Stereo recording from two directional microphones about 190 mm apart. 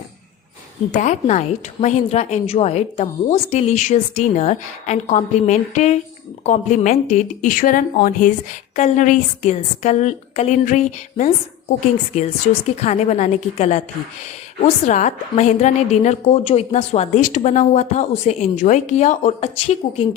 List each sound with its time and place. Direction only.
0.9 s a woman's voice: 40° left (ahead or behind)